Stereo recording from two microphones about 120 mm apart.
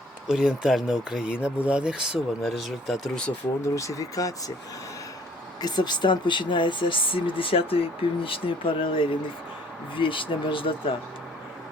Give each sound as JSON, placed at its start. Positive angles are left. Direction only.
{"t": 0.3, "sound": "speech", "side_deg": -5}
{"t": 3.8, "sound": "speech", "side_deg": 25}
{"t": 5.6, "sound": "speech", "side_deg": 35}